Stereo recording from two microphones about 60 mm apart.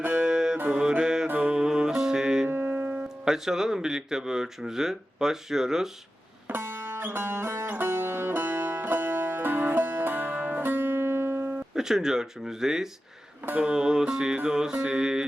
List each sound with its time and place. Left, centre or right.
0.1 s music: centre
1.3 s music: right
1.6 s music: centre
2.5 s music: right
3.2 s speech: centre
6.5 s music: right
11.7 s speech: centre